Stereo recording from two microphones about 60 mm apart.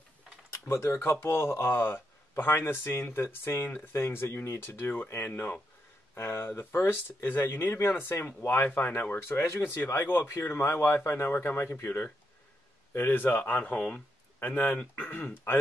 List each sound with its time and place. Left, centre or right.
0.7 s speech: left